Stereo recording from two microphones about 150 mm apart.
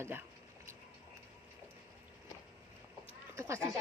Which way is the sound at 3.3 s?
15° right (ahead or behind).